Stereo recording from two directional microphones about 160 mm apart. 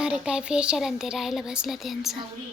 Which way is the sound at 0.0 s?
5° right (ahead or behind).